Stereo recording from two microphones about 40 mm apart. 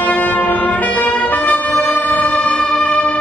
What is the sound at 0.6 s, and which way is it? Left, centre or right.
Music, left.